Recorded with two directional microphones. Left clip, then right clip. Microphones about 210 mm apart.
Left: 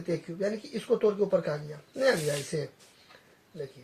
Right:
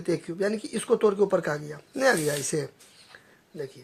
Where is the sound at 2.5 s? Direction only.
45° right (ahead or behind).